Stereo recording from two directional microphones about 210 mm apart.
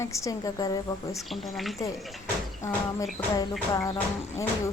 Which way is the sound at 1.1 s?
Centre (ahead or behind).